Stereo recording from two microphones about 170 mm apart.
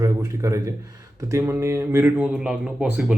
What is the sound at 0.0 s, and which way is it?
A man's voice, 20° right (ahead or behind).